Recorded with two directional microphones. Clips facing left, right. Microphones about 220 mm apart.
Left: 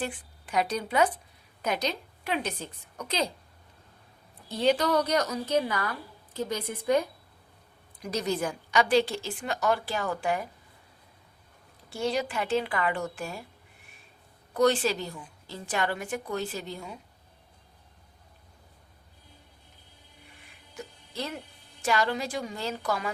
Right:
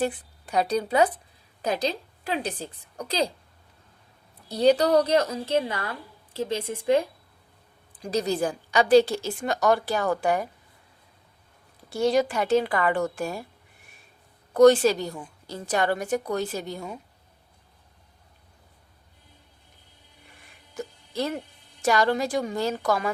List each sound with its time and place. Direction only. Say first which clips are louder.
0.0 s a woman's voice: right 7 dB; 40° right (ahead or behind)
4.5 s a woman's voice: right 5 dB; 40° right (ahead or behind)
11.9 s a woman's voice: right 7 dB; 45° right (ahead or behind)
14.5 s a woman's voice: right 8 dB; 45° right (ahead or behind)
21.8 s a woman's voice: right 5 dB; 45° right (ahead or behind)